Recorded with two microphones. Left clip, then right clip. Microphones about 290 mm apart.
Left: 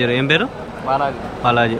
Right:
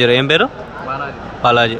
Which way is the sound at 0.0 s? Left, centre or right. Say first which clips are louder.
Right 4 dB; centre.